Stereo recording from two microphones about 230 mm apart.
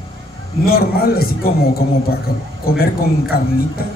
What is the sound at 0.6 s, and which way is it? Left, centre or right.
Speech, left.